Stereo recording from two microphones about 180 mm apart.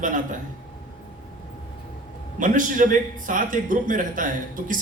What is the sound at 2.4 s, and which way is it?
A man's voice, 45° right (ahead or behind).